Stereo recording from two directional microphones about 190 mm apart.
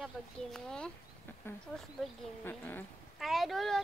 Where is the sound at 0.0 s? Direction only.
5° left (ahead or behind).